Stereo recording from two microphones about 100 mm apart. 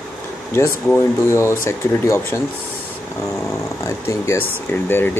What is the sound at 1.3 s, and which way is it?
Speech, 30° left (ahead or behind).